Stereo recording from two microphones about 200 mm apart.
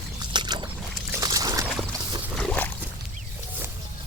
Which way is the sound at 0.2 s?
20° right (ahead or behind).